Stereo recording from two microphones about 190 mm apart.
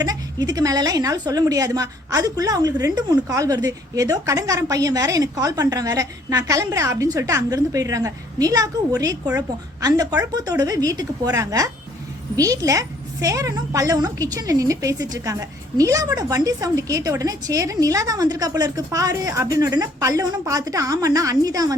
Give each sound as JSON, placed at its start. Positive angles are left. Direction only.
{"t": 0.0, "sound": "a woman's voice", "side_deg": -20}